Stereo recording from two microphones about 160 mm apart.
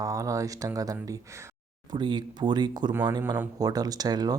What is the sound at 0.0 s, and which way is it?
Speech, 20° right (ahead or behind).